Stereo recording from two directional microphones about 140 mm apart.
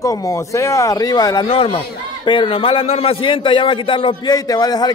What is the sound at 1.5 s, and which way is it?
A man's voice, 40° left (ahead or behind).